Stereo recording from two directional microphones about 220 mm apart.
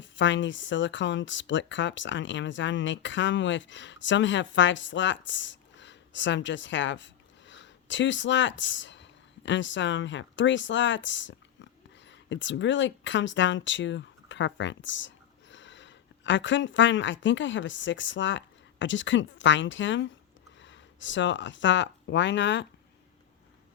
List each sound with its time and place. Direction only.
0.0 s speech: 55° left (ahead or behind)